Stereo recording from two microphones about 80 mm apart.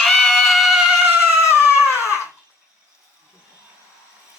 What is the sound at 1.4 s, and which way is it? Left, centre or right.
Crying, left.